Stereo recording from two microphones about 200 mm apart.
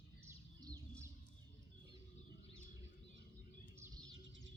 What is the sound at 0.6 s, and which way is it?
Bird, 15° right (ahead or behind).